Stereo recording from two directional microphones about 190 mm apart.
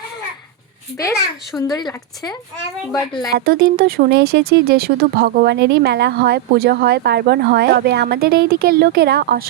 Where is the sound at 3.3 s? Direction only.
55° right (ahead or behind).